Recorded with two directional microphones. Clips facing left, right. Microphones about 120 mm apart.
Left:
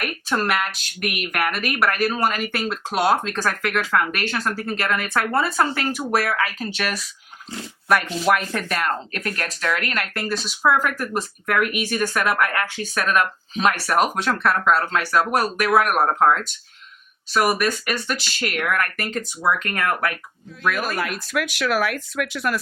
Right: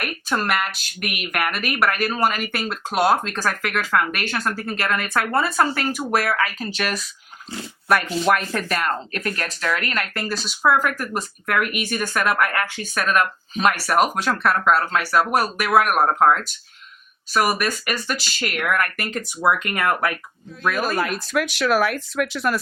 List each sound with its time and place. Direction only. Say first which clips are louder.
0.0 s speech: left 1 dB; centre (ahead or behind); by 20.1 s 15° right (ahead or behind)
20.7 s speech: right 2 dB; 30° right (ahead or behind)